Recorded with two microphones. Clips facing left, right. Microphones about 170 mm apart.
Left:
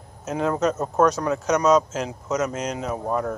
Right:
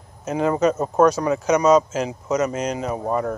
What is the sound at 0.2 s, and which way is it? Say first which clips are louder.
Speech: right 3 dB; centre (ahead or behind).